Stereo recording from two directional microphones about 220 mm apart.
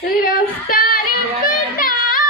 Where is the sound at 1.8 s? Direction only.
40° left (ahead or behind).